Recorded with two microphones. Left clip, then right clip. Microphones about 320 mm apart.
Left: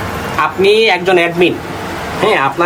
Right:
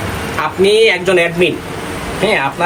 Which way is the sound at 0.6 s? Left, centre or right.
Left.